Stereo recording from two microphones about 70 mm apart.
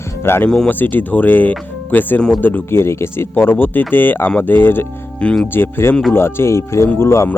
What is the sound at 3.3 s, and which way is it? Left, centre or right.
Speech, left.